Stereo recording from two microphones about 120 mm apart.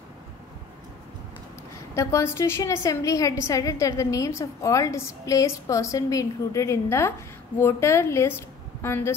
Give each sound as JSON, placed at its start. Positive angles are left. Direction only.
{"t": 2.0, "sound": "a woman's voice", "side_deg": 25}